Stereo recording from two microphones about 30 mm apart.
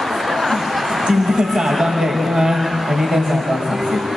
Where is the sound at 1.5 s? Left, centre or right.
Centre.